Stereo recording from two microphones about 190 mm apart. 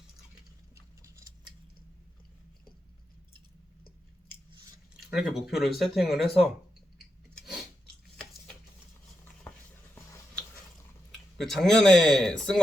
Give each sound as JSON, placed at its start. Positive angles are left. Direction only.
{"t": 1.0, "sound": "a sound", "side_deg": -20}
{"t": 4.9, "sound": "speech", "side_deg": 0}
{"t": 11.3, "sound": "speech", "side_deg": 0}